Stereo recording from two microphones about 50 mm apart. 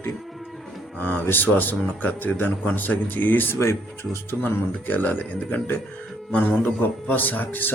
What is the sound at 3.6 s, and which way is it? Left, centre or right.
Speech, left.